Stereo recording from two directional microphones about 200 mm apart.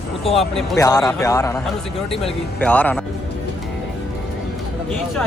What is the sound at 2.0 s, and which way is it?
Speech, 30° left (ahead or behind).